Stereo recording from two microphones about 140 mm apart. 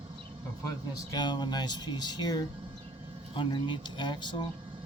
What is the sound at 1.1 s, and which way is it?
Speech, 30° left (ahead or behind).